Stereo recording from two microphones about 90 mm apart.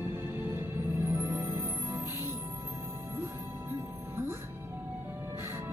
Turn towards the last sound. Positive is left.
turn(degrees=-25)  # may be behind; listen again after turning